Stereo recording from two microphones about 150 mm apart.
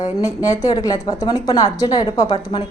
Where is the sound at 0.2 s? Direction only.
20° left (ahead or behind).